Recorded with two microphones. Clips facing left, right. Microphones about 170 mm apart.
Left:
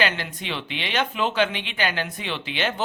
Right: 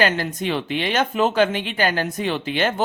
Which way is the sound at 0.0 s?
45° right (ahead or behind).